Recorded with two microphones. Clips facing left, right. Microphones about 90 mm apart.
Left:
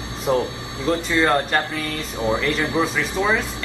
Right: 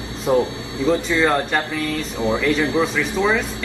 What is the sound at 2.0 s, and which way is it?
Speech, 25° right (ahead or behind).